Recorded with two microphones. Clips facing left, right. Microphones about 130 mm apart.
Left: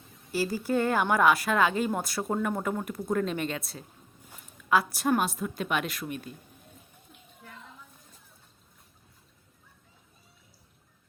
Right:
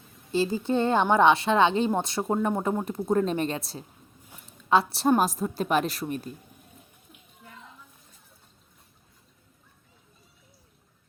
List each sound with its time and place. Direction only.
0.3 s a woman's voice: 20° right (ahead or behind)